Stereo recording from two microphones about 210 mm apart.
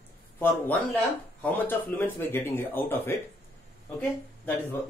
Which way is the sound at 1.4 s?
10° left (ahead or behind).